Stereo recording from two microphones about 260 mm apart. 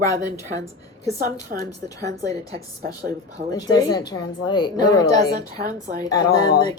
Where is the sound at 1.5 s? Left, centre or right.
Centre.